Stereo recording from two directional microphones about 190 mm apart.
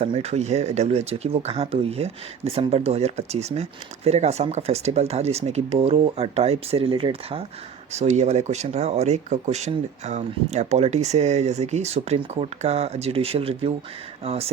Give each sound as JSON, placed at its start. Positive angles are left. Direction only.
{"t": 0.0, "sound": "speech", "side_deg": -35}